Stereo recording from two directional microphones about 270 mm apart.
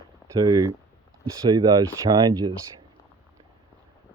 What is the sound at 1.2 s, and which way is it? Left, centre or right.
Speech, centre.